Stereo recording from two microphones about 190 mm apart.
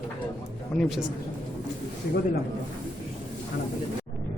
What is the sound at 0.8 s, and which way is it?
Speech, centre (ahead or behind).